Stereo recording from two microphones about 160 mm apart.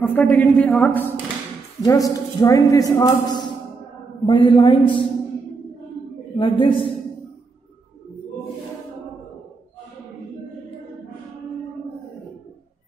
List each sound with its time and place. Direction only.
0.0 s a woman's voice: 10° left (ahead or behind)
1.8 s a man's voice: 20° left (ahead or behind)
6.3 s a man's voice: 30° left (ahead or behind)